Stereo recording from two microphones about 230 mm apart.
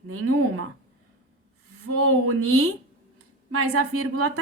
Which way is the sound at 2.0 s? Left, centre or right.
Right.